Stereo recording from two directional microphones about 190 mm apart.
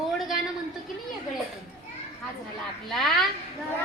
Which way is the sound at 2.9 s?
Centre (ahead or behind).